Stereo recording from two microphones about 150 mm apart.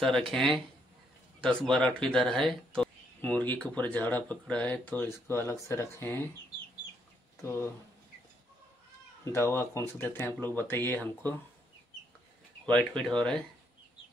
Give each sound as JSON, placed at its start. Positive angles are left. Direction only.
{"t": 0.0, "sound": "speech", "side_deg": 5}
{"t": 7.4, "sound": "speech", "side_deg": 15}
{"t": 9.2, "sound": "speech", "side_deg": 15}
{"t": 12.7, "sound": "speech", "side_deg": 5}